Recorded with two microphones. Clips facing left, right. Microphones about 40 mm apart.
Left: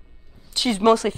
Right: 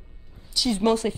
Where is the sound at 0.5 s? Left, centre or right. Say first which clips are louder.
Left 4 dB; left.